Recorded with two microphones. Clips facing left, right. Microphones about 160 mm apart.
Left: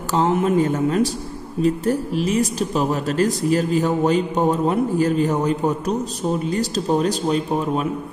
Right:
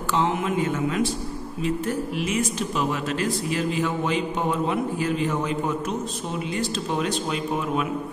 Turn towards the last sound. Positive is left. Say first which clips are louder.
# left 4 dB
turn(degrees=35)  # may be behind; listen again after turning